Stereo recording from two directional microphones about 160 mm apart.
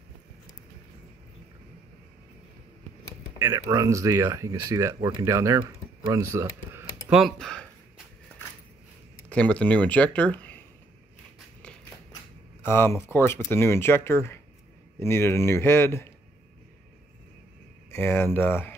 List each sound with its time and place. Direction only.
3.3 s speech: 15° right (ahead or behind)
7.2 s speech: centre (ahead or behind)
9.3 s speech: 10° left (ahead or behind)
11.3 s a sound: 5° left (ahead or behind)
12.6 s speech: 15° left (ahead or behind)
17.9 s speech: 15° left (ahead or behind)